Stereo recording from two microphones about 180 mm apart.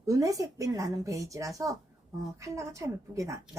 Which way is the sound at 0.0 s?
20° right (ahead or behind).